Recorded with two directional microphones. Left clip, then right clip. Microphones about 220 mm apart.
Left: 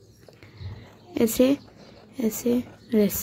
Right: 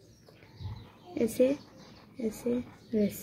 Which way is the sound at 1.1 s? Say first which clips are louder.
Left 6 dB; 45° left (ahead or behind).